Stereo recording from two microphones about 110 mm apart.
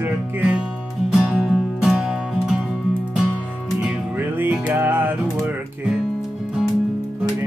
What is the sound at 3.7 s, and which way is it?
Music, 15° right (ahead or behind).